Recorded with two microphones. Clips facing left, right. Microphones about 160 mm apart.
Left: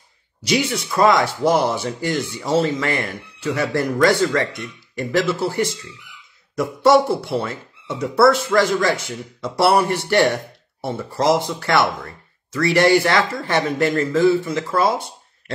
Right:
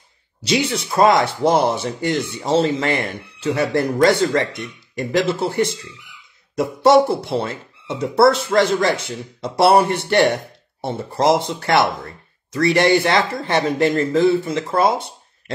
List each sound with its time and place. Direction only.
0.4 s speech: 25° right (ahead or behind)